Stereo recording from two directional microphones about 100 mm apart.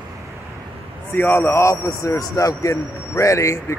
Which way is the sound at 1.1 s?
20° left (ahead or behind).